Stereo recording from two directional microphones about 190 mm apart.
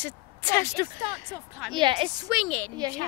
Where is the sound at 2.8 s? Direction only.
20° right (ahead or behind).